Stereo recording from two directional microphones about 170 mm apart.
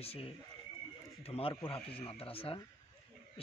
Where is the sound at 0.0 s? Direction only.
35° left (ahead or behind).